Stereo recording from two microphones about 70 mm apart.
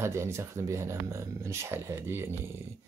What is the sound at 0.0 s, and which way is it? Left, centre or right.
Speech, right.